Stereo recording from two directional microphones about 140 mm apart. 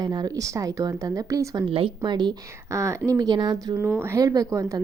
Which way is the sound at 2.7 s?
20° right (ahead or behind).